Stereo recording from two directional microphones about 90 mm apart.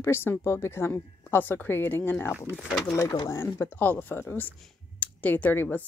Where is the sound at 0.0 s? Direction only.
25° left (ahead or behind).